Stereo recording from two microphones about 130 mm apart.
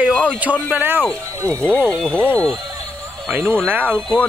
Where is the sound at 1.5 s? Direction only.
10° left (ahead or behind).